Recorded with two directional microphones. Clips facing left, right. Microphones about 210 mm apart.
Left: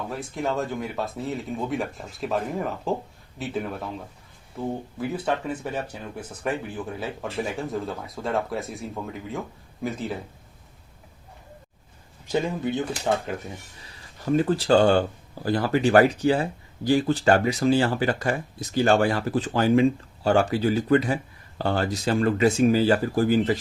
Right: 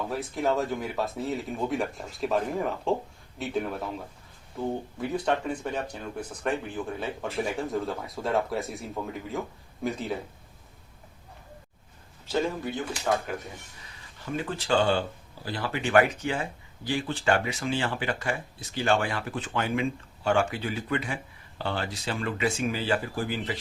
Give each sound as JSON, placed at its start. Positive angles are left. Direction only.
{"t": 0.1, "sound": "speech", "side_deg": 0}
{"t": 4.9, "sound": "speech", "side_deg": 5}
{"t": 12.2, "sound": "speech", "side_deg": 15}
{"t": 14.3, "sound": "speech", "side_deg": 40}